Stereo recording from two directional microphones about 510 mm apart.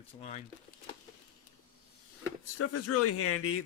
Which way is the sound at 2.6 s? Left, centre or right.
Left.